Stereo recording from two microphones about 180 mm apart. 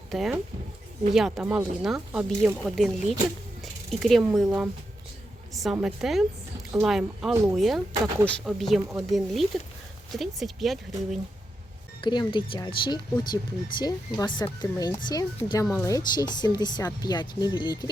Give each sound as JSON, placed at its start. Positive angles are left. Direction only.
{"t": 0.1, "sound": "speech", "side_deg": 0}
{"t": 5.8, "sound": "speech", "side_deg": 0}
{"t": 12.0, "sound": "speech", "side_deg": 25}